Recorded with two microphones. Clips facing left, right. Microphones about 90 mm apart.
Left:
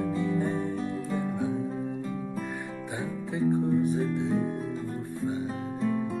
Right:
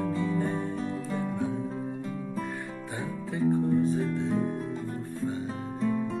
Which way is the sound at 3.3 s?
15° left (ahead or behind).